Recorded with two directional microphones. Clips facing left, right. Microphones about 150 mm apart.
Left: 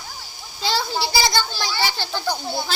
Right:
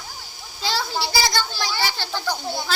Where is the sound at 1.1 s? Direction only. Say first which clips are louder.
Left 3 dB; 25° left (ahead or behind).